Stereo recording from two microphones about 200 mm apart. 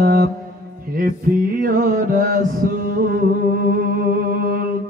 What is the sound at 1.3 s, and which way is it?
Music, 50° right (ahead or behind).